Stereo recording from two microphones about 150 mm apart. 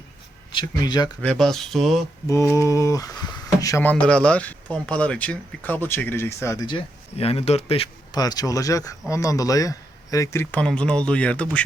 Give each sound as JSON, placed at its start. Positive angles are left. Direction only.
{"t": 0.5, "sound": "speech", "side_deg": 30}
{"t": 1.2, "sound": "speech", "side_deg": 5}
{"t": 2.2, "sound": "speech", "side_deg": 20}
{"t": 3.8, "sound": "speech", "side_deg": 10}
{"t": 6.7, "sound": "speech", "side_deg": 40}
{"t": 8.1, "sound": "speech", "side_deg": 25}